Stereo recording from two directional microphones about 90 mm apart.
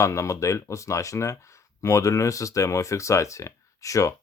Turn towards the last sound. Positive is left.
turn(degrees=35)  # may be behind; listen again after turning